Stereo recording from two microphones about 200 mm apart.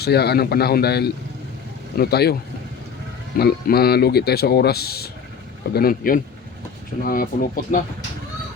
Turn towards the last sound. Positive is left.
turn(degrees=45)  # may be behind; listen again after turning